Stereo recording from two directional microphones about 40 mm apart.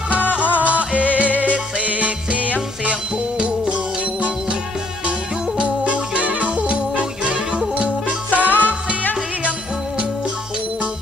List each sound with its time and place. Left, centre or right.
0.7 s music: right
5.9 s music: right
8.3 s music: left